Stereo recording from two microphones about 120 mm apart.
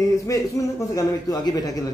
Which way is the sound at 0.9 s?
30° left (ahead or behind).